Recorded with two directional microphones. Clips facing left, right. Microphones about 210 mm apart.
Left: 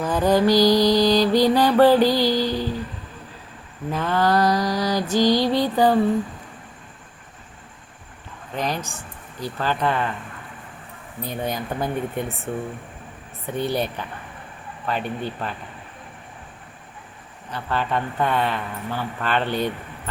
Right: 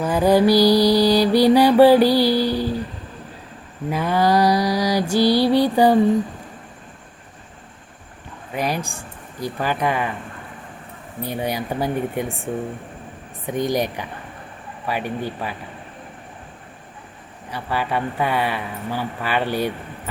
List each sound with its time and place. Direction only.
0.0 s mantra: 10° right (ahead or behind)
3.8 s mantra: 10° right (ahead or behind)
8.5 s speech: 10° right (ahead or behind)
11.2 s mantra: 10° right (ahead or behind)
13.5 s mantra: 15° right (ahead or behind)
17.5 s mantra: 10° right (ahead or behind)